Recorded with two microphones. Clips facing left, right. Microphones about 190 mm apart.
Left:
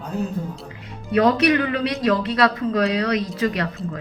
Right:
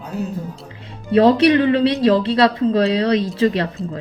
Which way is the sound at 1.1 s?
30° right (ahead or behind).